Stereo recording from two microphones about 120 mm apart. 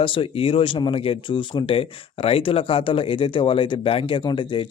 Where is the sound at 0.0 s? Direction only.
45° left (ahead or behind).